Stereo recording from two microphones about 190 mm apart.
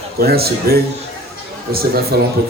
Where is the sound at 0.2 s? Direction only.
55° right (ahead or behind).